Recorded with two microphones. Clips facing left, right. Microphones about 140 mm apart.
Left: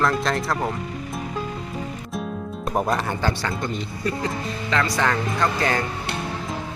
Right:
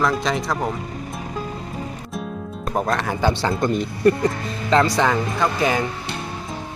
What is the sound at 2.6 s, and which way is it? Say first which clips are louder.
Speech: right 1 dB; 5° left (ahead or behind).